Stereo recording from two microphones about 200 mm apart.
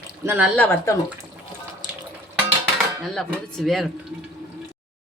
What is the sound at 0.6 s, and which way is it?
Speech, 10° left (ahead or behind).